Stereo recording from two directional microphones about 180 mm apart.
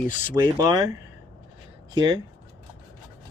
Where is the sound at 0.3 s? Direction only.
20° right (ahead or behind).